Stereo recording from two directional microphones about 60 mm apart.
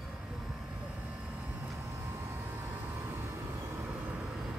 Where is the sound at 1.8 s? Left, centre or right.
Right.